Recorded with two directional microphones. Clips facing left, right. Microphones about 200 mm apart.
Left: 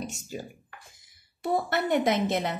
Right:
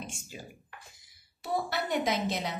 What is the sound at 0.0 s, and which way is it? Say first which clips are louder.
Speech: left 7 dB; 40° left (ahead or behind).